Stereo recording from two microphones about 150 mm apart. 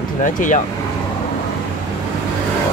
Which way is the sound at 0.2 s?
60° left (ahead or behind).